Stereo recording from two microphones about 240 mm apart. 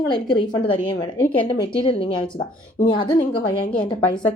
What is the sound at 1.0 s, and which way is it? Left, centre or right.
A woman's voice, centre.